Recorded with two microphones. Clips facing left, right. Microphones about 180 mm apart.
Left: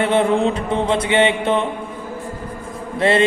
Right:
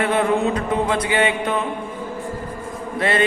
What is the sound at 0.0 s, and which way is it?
Mantra, 25° left (ahead or behind).